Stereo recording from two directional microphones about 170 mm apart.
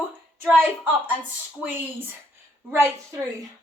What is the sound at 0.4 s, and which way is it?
A woman's voice, 10° right (ahead or behind).